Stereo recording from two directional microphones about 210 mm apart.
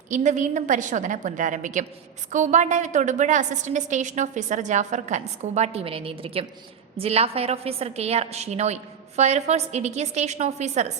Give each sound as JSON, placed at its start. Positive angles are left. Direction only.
{"t": 0.1, "sound": "a woman's voice", "side_deg": -35}